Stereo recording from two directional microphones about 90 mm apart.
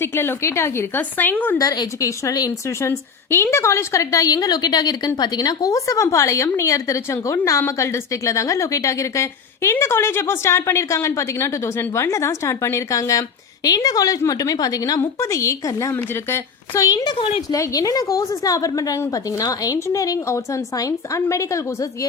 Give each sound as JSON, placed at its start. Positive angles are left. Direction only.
{"t": 0.0, "sound": "a woman's voice", "side_deg": 25}
{"t": 1.5, "sound": "a woman's voice", "side_deg": 45}
{"t": 2.6, "sound": "a woman's voice", "side_deg": 30}
{"t": 16.8, "sound": "a woman's voice", "side_deg": 50}
{"t": 17.5, "sound": "a woman's voice", "side_deg": 40}